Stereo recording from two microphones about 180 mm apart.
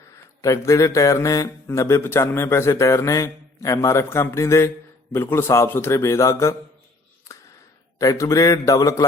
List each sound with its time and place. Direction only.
0.4 s speech: 15° left (ahead or behind)
7.9 s a man's voice: 20° left (ahead or behind)